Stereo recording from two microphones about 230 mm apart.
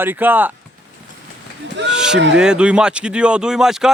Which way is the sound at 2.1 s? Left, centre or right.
Right.